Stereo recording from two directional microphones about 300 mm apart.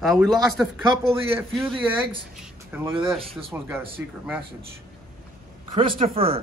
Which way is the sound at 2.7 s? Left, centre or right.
Centre.